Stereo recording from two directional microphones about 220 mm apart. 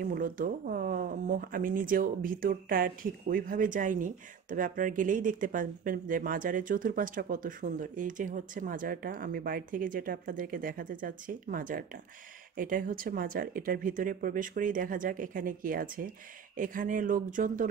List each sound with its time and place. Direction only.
0.0 s speech: 40° right (ahead or behind)